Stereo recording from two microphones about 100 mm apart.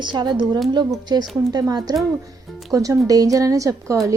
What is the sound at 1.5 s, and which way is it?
A woman's voice, 40° right (ahead or behind).